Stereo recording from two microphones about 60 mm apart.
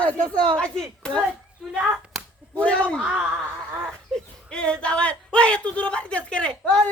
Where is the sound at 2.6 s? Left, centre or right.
Centre.